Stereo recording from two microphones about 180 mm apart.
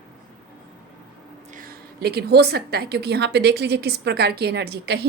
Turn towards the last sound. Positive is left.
turn(degrees=-65)  # may be behind; listen again after turning